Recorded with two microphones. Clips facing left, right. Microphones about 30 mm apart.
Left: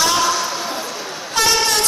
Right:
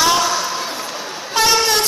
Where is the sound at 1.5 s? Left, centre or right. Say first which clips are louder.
Right 2 dB; centre.